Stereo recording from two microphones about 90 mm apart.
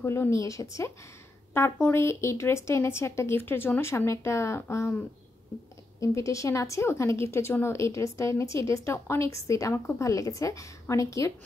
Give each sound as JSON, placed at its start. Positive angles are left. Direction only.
{"t": 0.0, "sound": "a woman's voice", "side_deg": 30}
{"t": 1.5, "sound": "a woman's voice", "side_deg": 25}